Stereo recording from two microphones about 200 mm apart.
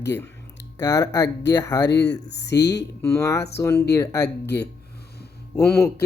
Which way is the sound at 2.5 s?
15° left (ahead or behind).